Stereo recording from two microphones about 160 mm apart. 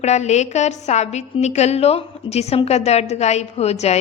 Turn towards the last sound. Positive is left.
turn(degrees=40)  # may be behind; listen again after turning